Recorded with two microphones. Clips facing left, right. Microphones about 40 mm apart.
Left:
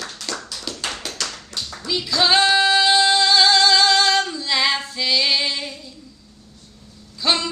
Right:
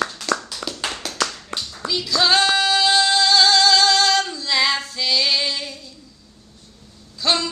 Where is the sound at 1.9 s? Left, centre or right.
Centre.